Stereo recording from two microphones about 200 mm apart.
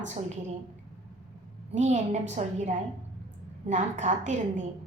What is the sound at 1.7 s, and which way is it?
A woman's voice, 35° right (ahead or behind).